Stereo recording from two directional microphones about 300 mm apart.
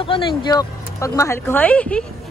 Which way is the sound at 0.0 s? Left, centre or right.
Centre.